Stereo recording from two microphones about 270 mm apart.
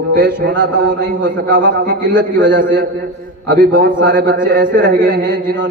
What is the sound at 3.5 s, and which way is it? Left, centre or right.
A man's voice, right.